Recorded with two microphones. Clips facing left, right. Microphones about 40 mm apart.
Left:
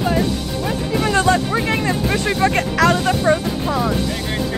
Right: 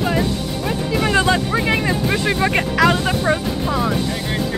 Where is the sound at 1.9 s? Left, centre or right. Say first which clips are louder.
Even; centre.